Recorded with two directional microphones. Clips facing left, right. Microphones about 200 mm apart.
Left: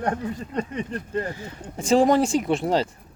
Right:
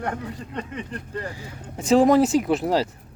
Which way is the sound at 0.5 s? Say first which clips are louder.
Left 4 dB; 35° left (ahead or behind).